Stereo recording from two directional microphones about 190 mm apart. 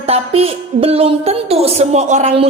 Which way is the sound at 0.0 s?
30° right (ahead or behind).